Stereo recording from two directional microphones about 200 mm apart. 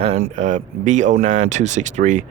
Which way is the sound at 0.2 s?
40° right (ahead or behind).